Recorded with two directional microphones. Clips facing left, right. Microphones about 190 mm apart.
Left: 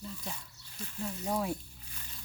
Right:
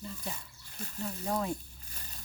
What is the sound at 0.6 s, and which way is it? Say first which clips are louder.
Speech: right 1 dB; 50° right (ahead or behind).